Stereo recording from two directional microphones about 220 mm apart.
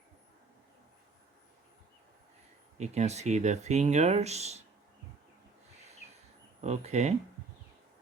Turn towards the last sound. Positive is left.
turn(degrees=-30)  # may be behind; listen again after turning